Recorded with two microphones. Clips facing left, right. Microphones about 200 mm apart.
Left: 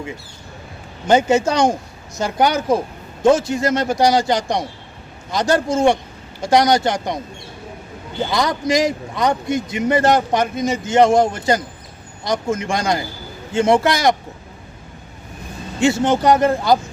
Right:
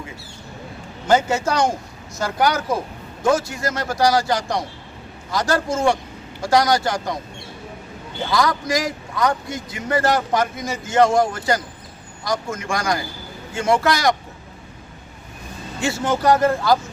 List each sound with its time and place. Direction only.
1.0 s a man's voice: 20° left (ahead or behind)
8.3 s a man's voice: 20° left (ahead or behind)
15.8 s a man's voice: 20° left (ahead or behind)